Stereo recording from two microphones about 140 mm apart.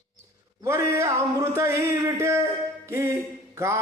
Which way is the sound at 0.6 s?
20° right (ahead or behind).